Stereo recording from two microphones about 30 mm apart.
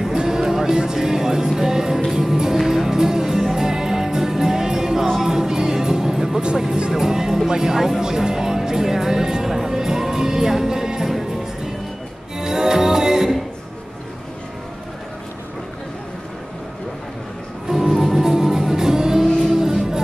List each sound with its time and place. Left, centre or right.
0.0 s music: centre
17.6 s music: centre